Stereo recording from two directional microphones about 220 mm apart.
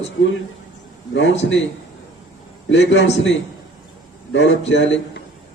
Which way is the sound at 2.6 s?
55° left (ahead or behind).